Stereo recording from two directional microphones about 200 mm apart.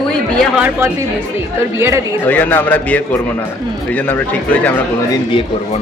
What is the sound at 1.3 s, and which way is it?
Speech, 15° right (ahead or behind).